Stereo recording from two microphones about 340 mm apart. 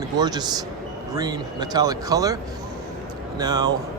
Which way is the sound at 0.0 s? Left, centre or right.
Centre.